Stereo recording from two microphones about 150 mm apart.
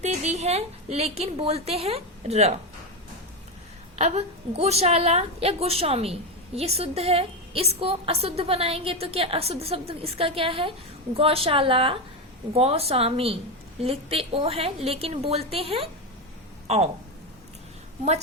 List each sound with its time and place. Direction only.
0.0 s a woman's voice: 50° right (ahead or behind)
3.9 s a woman's voice: 45° right (ahead or behind)